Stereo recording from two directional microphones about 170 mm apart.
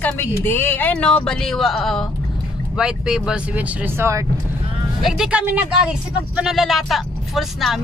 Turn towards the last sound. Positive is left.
turn(degrees=0)  # may be behind; listen again after turning